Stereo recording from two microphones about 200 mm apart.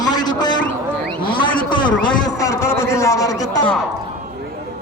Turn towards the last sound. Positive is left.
turn(degrees=20)  # may be behind; listen again after turning